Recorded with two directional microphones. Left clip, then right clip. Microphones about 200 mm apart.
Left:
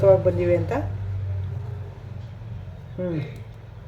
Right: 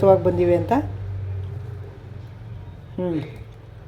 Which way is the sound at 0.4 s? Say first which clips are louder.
Right 3 dB; 40° right (ahead or behind).